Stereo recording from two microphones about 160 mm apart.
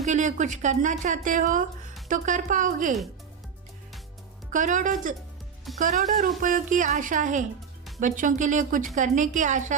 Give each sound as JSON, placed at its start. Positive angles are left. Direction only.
{"t": 0.0, "sound": "speech", "side_deg": -50}
{"t": 4.5, "sound": "speech", "side_deg": -55}